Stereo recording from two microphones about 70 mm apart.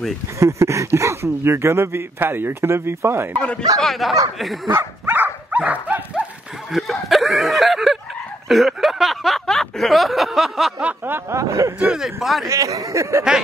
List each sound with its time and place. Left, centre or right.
0.4 s speech: right
3.8 s speech: centre
4.7 s dog: right
5.6 s speech: right
6.7 s speech: centre
8.5 s a sound: centre
10.8 s snicker: right
11.1 s speech: right
11.9 s speech: centre
12.4 s speech: right